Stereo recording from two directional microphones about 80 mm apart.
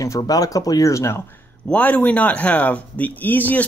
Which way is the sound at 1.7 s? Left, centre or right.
Left.